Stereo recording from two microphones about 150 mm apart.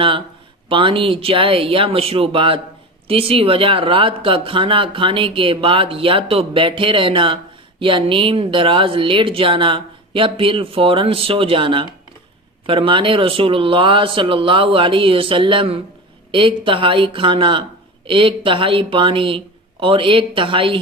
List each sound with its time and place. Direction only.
0.7 s speech: 35° right (ahead or behind)